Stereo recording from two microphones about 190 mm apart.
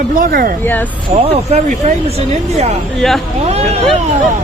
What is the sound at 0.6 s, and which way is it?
Speech, 10° left (ahead or behind).